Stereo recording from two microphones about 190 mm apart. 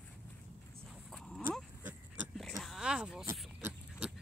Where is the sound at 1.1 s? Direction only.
5° left (ahead or behind).